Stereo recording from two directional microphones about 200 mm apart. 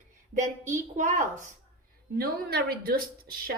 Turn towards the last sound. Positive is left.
turn(degrees=-50)  # may be behind; listen again after turning